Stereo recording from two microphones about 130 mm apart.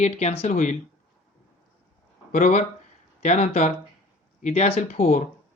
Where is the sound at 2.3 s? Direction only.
90° left.